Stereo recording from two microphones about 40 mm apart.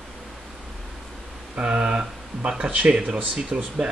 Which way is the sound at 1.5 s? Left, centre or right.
Right.